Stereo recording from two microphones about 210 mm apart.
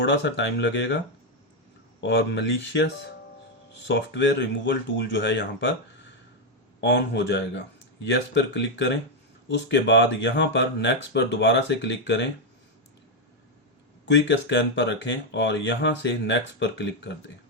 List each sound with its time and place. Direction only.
0.0 s speech: 60° left (ahead or behind)
2.0 s speech: 55° left (ahead or behind)
6.8 s speech: 55° left (ahead or behind)
14.0 s speech: 55° left (ahead or behind)